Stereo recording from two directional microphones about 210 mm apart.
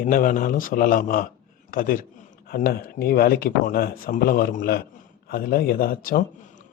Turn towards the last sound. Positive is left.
turn(degrees=45)  # may be behind; listen again after turning